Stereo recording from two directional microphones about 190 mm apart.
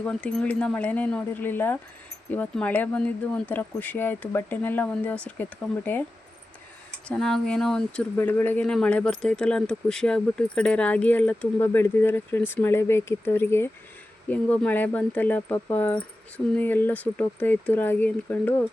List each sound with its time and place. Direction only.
0.0 s speech: 5° left (ahead or behind)
7.1 s speech: 5° left (ahead or behind)